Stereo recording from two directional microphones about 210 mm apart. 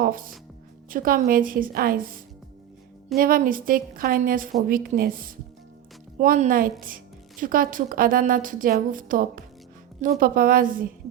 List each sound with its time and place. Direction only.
0.0 s a woman's voice: 40° right (ahead or behind)